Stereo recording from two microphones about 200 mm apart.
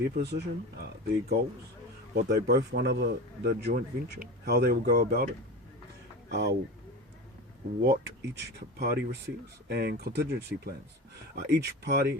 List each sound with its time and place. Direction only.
0.2 s speech: 55° right (ahead or behind)
7.8 s speech: 50° right (ahead or behind)